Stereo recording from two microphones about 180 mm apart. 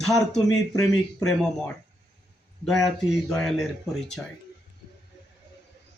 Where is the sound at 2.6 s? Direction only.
Centre (ahead or behind).